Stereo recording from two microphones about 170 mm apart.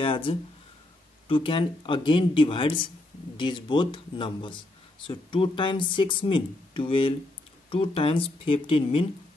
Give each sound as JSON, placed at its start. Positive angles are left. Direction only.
{"t": 0.0, "sound": "speech", "side_deg": 30}